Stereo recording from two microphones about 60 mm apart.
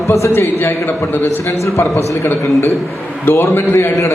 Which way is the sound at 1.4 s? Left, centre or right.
Left.